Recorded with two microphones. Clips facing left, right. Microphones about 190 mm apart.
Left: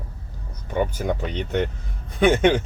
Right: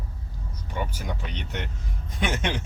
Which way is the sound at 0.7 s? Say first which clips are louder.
Left 9 dB; 55° left (ahead or behind).